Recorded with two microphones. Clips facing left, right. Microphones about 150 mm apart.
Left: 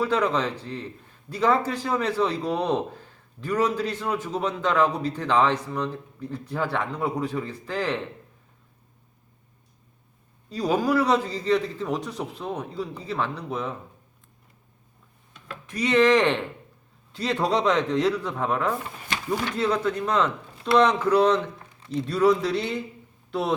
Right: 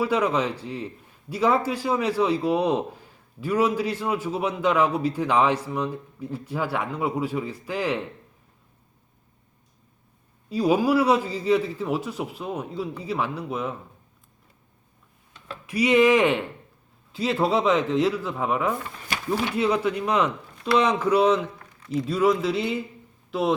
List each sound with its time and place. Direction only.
0.0 s a man's voice: 10° right (ahead or behind)
10.5 s a man's voice: 10° right (ahead or behind)
15.6 s a man's voice: 10° right (ahead or behind)